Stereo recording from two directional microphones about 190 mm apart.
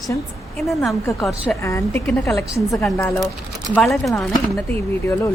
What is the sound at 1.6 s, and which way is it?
Speech, 15° left (ahead or behind).